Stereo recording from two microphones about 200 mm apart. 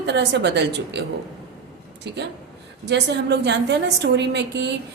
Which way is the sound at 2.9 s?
60° right (ahead or behind).